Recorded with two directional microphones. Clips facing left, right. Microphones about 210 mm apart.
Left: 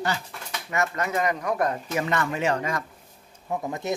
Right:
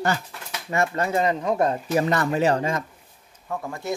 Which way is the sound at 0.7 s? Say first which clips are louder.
Right 4 dB; 30° right (ahead or behind).